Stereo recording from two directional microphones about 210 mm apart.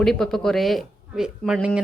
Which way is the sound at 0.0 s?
Centre (ahead or behind).